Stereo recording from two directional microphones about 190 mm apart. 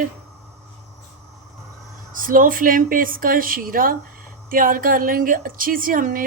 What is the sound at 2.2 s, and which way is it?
Speech, 45° right (ahead or behind).